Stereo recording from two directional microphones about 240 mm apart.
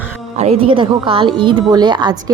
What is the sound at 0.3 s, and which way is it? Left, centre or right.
A woman's voice, right.